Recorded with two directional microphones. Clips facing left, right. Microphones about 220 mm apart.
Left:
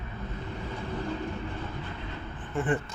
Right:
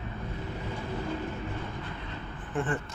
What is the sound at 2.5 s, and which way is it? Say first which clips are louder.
Speech: left 1 dB; centre (ahead or behind).